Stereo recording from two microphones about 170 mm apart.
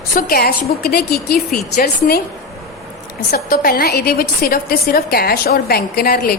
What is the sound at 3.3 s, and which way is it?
A woman's voice, 60° left (ahead or behind).